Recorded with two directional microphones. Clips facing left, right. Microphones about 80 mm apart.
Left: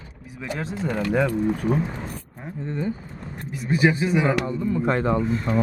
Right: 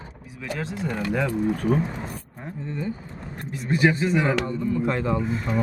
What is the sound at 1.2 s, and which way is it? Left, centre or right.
Speech, centre.